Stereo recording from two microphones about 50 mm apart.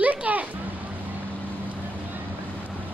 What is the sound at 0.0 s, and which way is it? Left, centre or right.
Music, right.